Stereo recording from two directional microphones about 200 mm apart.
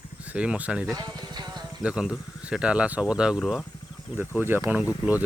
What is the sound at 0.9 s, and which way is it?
Music, 20° right (ahead or behind).